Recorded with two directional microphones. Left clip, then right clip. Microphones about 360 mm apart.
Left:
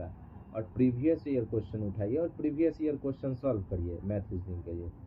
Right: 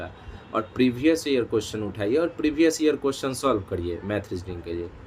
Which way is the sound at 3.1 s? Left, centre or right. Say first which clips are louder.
Right 9 dB; right.